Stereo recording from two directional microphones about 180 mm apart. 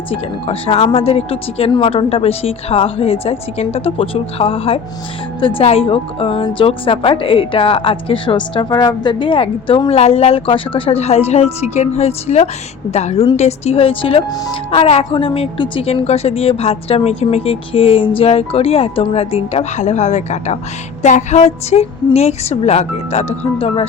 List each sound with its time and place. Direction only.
0.1 s a woman's voice: 30° left (ahead or behind)